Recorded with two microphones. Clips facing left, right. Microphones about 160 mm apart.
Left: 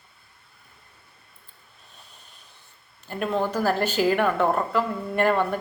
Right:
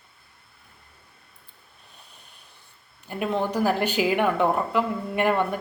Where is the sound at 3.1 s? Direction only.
15° right (ahead or behind).